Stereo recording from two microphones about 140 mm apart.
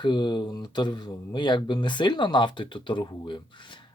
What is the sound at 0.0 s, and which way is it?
Speech, 30° left (ahead or behind).